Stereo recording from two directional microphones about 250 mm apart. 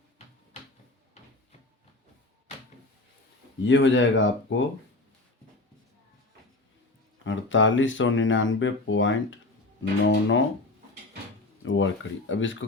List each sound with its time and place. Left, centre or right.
3.6 s speech: left
7.3 s speech: left
11.6 s speech: left